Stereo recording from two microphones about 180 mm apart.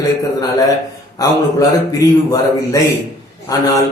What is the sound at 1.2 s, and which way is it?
A man's voice, 20° left (ahead or behind).